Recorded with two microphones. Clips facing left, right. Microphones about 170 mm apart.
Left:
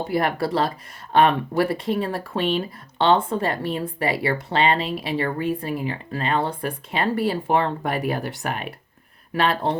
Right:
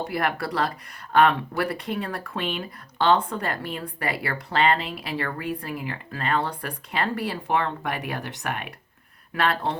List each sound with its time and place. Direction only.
0.1 s speech: 25° left (ahead or behind)